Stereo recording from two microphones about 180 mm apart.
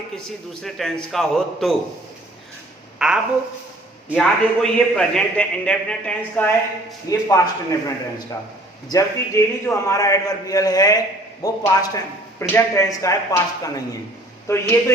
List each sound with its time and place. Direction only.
0.6 s a man's voice: centre (ahead or behind)
3.0 s a man's voice: 5° right (ahead or behind)
7.1 s speech: 20° left (ahead or behind)
8.9 s a man's voice: 15° left (ahead or behind)